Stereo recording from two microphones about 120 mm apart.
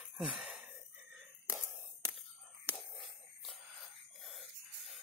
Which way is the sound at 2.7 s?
20° right (ahead or behind).